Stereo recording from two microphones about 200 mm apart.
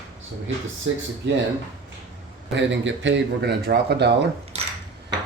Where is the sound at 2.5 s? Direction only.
65° right (ahead or behind).